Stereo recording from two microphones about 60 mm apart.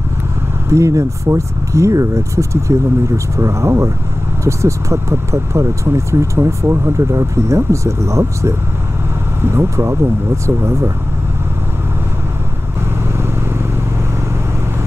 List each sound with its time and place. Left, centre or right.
0.7 s speech: right
9.4 s speech: right